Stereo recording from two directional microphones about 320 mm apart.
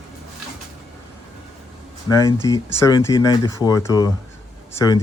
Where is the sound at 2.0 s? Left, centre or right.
Centre.